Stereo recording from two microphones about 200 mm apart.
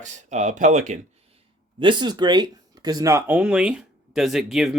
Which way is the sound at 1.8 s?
20° right (ahead or behind).